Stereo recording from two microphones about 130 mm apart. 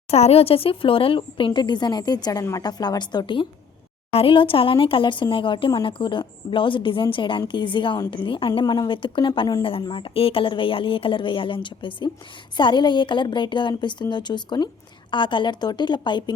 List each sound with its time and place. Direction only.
0.1 s speech: 55° left (ahead or behind); by 16.3 s 35° left (ahead or behind)